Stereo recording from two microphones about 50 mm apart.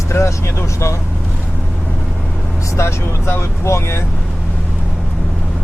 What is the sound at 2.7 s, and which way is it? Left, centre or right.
Speech, left.